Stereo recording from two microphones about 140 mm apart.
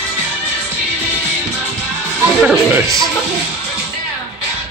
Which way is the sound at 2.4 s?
15° right (ahead or behind).